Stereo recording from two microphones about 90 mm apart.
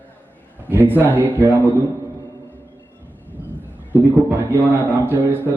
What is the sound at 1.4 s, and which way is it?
Speech, 20° left (ahead or behind).